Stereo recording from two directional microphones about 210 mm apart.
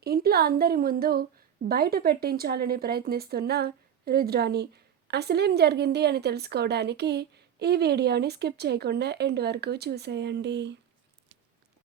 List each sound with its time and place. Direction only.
0.0 s a woman's voice: 45° right (ahead or behind)